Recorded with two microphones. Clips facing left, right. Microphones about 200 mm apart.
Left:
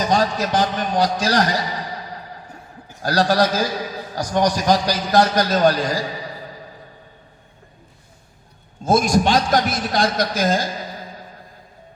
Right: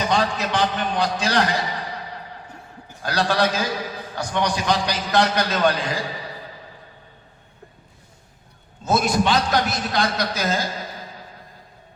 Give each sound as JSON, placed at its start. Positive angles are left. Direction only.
{"t": 0.1, "sound": "a man's voice", "side_deg": 40}
{"t": 3.0, "sound": "a man's voice", "side_deg": 40}
{"t": 8.8, "sound": "a man's voice", "side_deg": 45}